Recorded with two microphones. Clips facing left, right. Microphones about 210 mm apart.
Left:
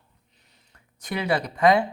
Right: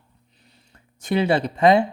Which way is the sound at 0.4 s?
30° right (ahead or behind).